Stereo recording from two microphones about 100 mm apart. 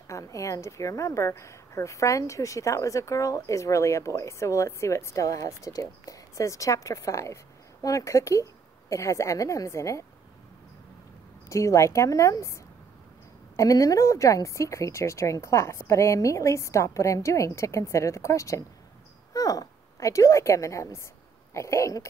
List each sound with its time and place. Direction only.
0.1 s a woman's voice: 35° left (ahead or behind)
11.4 s a woman's voice: 30° left (ahead or behind)
13.6 s a woman's voice: 35° left (ahead or behind)